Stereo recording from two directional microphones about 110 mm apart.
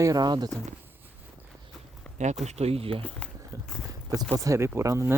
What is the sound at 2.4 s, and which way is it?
Speech, 70° right (ahead or behind).